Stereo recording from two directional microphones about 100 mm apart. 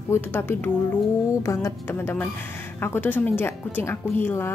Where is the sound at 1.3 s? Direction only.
30° left (ahead or behind).